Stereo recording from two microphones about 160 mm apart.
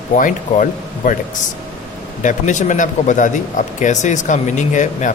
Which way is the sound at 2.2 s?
50° left (ahead or behind).